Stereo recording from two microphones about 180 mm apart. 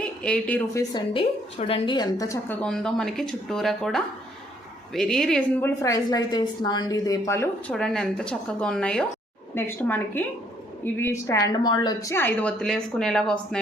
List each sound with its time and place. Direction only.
0.2 s a woman's voice: 5° left (ahead or behind)
0.8 s a woman's voice: 25° left (ahead or behind)
2.6 s a woman's voice: 5° left (ahead or behind); by 12.1 s 25° left (ahead or behind)
12.1 s a woman's voice: 10° left (ahead or behind)